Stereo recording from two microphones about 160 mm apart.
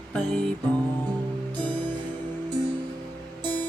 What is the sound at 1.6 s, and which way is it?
Music, 10° left (ahead or behind).